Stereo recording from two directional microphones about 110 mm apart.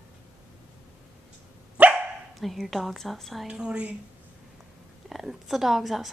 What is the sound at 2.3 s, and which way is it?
A woman's voice, centre (ahead or behind).